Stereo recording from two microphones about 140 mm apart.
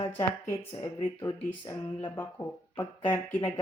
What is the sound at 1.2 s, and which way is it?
A woman's voice, 20° left (ahead or behind).